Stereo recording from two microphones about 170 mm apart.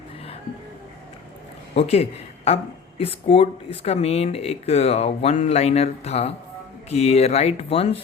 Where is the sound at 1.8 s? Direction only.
35° left (ahead or behind).